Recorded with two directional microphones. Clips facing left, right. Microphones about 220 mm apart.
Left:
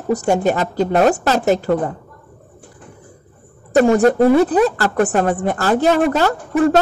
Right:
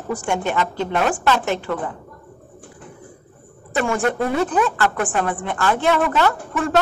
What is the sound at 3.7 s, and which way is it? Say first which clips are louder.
A woman's voice: left 9 dB; 40° left (ahead or behind).